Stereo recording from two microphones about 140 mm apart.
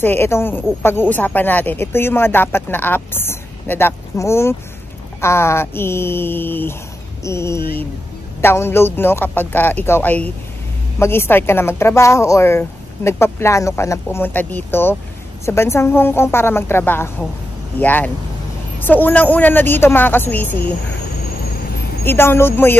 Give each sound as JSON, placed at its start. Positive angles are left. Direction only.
{"t": 0.0, "sound": "speech", "side_deg": 15}
{"t": 22.0, "sound": "speech", "side_deg": 15}